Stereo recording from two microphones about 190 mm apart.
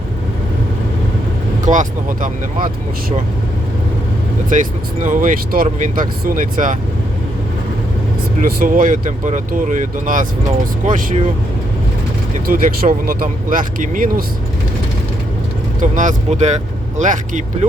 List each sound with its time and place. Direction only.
1.6 s speech: 40° right (ahead or behind)
4.4 s speech: 40° right (ahead or behind)
8.4 s speech: 50° right (ahead or behind)
12.5 s speech: 50° right (ahead or behind)
15.8 s speech: 40° right (ahead or behind)